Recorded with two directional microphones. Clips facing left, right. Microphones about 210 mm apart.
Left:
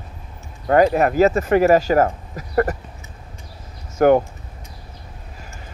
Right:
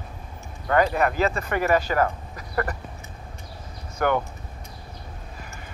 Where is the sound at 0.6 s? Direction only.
40° left (ahead or behind).